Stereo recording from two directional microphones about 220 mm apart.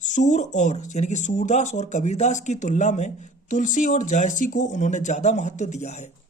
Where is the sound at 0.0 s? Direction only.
35° left (ahead or behind).